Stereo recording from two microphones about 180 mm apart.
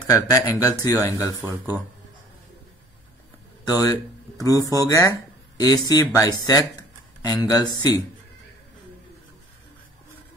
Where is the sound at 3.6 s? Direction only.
20° left (ahead or behind).